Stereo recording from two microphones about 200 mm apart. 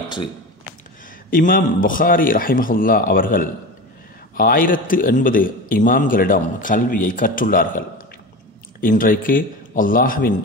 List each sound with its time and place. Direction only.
1.3 s a man's voice: 40° left (ahead or behind)
8.8 s a man's voice: 45° left (ahead or behind)